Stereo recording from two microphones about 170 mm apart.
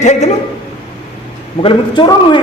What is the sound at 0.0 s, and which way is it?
Speech, 45° left (ahead or behind).